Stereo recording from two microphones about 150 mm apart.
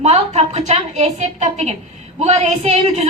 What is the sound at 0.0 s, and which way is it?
A woman's voice, 45° right (ahead or behind).